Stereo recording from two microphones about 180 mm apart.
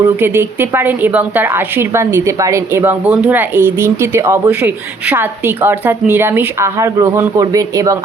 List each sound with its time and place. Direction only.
0.0 s a woman's voice: 15° right (ahead or behind)